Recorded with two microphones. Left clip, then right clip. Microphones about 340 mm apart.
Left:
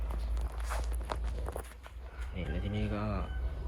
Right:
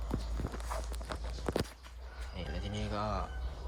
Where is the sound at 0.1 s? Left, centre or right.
Right.